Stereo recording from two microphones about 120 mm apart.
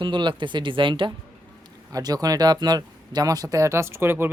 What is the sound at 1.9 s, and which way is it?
A man's voice, 30° right (ahead or behind).